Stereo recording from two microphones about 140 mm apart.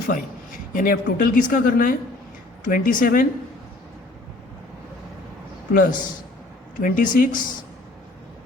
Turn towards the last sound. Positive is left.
turn(degrees=75)  # may be behind; listen again after turning